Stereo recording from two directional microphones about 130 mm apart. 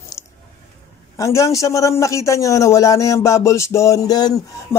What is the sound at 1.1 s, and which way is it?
A man's voice, 25° left (ahead or behind).